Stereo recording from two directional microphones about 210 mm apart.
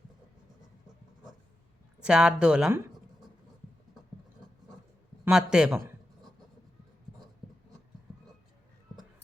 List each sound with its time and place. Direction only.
2.0 s speech: 5° right (ahead or behind)
5.2 s speech: 5° right (ahead or behind)